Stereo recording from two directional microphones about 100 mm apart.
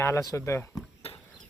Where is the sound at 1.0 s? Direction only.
90° left.